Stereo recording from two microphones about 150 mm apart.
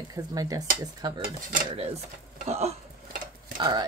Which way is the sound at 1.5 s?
45° right (ahead or behind).